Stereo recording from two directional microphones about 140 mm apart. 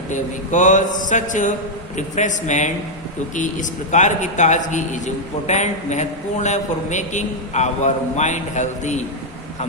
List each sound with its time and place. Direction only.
0.1 s a man's voice: 65° left (ahead or behind)